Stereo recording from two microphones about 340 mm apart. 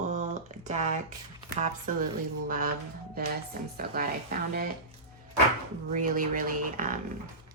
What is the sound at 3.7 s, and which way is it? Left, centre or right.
Speech, right.